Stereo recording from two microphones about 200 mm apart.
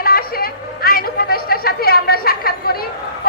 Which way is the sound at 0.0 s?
50° left (ahead or behind).